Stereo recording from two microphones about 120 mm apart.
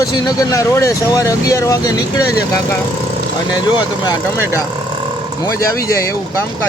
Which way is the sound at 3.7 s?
35° left (ahead or behind).